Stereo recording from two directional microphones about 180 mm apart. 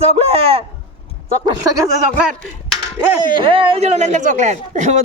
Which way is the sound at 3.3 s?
30° right (ahead or behind).